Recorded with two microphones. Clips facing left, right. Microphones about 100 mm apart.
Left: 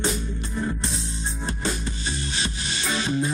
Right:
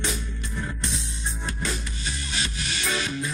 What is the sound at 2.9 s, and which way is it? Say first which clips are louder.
Music: left 6 dB; 30° left (ahead or behind).